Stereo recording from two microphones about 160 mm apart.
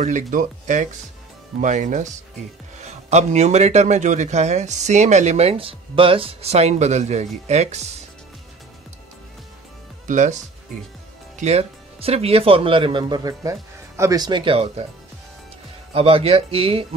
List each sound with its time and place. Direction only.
0.0 s a man's voice: 55° right (ahead or behind)
10.0 s speech: 50° right (ahead or behind)
11.3 s speech: 45° right (ahead or behind)
15.9 s speech: 35° right (ahead or behind)